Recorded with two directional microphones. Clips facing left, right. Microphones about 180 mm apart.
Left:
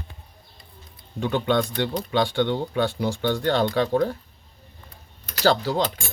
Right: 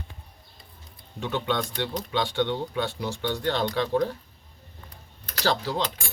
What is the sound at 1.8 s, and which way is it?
Speech, 50° left (ahead or behind).